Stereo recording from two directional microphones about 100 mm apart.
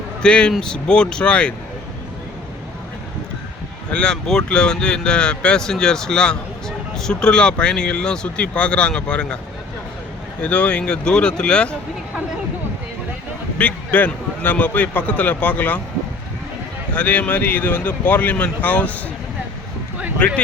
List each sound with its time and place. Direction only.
0.2 s speech: 10° left (ahead or behind)
3.9 s speech: 5° left (ahead or behind)
10.4 s speech: 10° left (ahead or behind)
13.6 s speech: 15° left (ahead or behind)
16.9 s speech: 15° left (ahead or behind)
20.1 s speech: 10° left (ahead or behind)